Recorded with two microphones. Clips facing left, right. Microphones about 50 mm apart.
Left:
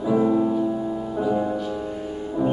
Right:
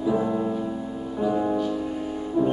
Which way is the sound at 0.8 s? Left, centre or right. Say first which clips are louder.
Left 5 dB; centre.